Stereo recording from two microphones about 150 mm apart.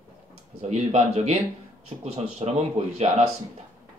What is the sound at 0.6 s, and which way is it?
Speech, 45° right (ahead or behind).